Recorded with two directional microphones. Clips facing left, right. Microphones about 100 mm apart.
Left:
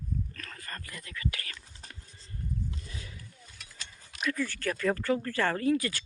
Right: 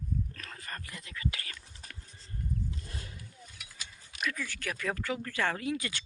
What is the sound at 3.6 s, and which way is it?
Mechanisms, 10° right (ahead or behind).